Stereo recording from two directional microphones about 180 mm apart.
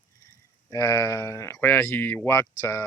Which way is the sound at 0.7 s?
15° left (ahead or behind).